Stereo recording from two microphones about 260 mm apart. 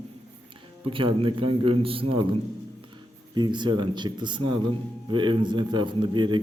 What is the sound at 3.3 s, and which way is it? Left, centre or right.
A man's voice, centre.